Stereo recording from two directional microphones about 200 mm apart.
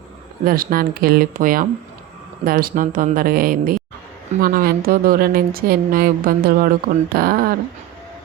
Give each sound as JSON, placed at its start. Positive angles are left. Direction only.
{"t": 0.4, "sound": "a woman's voice", "side_deg": -45}